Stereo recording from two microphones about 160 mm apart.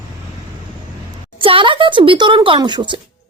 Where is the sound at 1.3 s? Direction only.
30° right (ahead or behind).